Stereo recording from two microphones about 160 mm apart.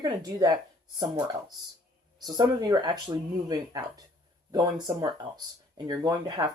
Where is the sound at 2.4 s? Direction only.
25° right (ahead or behind).